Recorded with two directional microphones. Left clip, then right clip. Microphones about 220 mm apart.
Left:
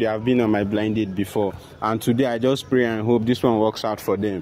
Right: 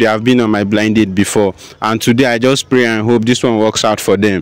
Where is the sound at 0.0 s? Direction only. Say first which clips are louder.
Right 9 dB; 50° right (ahead or behind).